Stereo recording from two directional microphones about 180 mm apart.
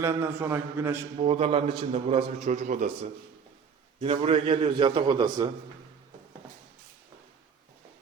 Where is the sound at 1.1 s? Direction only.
35° right (ahead or behind).